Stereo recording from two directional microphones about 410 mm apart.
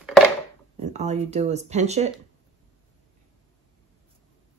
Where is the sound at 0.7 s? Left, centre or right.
Centre.